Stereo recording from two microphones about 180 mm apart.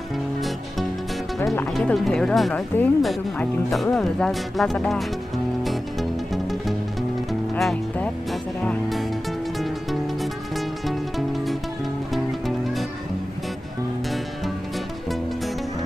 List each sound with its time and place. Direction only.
1.4 s speech: 15° left (ahead or behind)
1.7 s speech: centre (ahead or behind)
6.3 s music: centre (ahead or behind)